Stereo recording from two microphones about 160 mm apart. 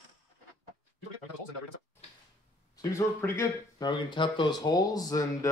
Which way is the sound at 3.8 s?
30° left (ahead or behind).